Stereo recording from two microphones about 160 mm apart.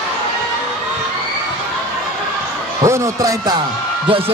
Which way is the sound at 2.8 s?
20° right (ahead or behind).